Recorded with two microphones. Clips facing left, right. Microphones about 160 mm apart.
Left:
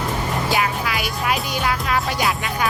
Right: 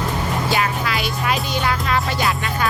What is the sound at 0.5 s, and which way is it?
Music, 5° left (ahead or behind).